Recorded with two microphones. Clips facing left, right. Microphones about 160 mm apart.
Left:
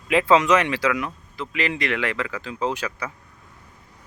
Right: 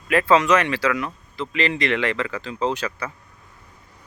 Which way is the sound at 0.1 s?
15° left (ahead or behind).